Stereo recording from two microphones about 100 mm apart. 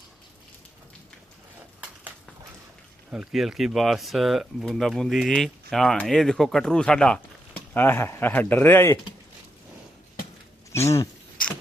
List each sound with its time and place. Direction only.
3.1 s speech: 5° right (ahead or behind)
7.7 s speech: 20° left (ahead or behind)
10.7 s a sound: 30° left (ahead or behind)